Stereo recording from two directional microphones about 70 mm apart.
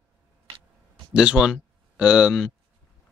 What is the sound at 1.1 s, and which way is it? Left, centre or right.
Speech, centre.